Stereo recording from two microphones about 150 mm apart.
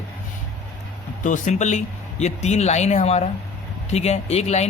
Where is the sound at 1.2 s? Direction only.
55° left (ahead or behind).